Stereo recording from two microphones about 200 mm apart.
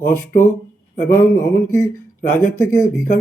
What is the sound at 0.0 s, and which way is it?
Speech, 10° left (ahead or behind).